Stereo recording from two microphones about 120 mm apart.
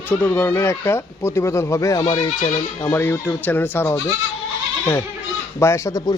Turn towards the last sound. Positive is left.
turn(degrees=30)  # may be behind; listen again after turning